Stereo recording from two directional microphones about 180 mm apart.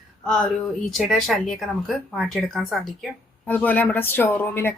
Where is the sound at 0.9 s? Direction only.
Centre (ahead or behind).